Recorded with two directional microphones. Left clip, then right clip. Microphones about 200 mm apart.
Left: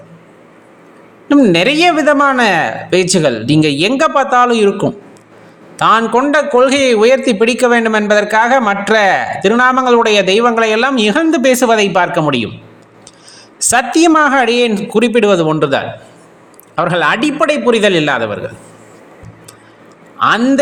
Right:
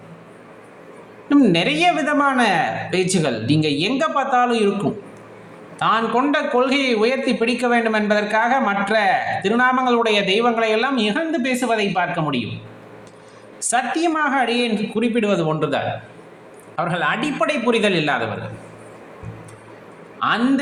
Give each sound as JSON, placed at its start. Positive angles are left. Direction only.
{"t": 1.3, "sound": "a man's voice", "side_deg": 40}
{"t": 5.7, "sound": "a man's voice", "side_deg": 45}
{"t": 13.7, "sound": "a man's voice", "side_deg": 55}
{"t": 20.1, "sound": "speech", "side_deg": 45}